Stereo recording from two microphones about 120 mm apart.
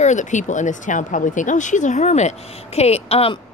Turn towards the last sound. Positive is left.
turn(degrees=55)  # may be behind; listen again after turning